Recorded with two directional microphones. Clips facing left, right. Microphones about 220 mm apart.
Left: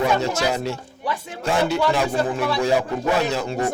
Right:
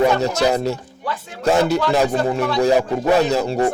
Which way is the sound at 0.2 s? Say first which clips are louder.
Right 4 dB; 40° right (ahead or behind).